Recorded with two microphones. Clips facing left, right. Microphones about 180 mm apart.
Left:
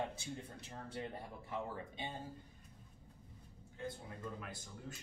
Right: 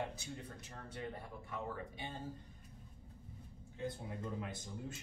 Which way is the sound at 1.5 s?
20° left (ahead or behind).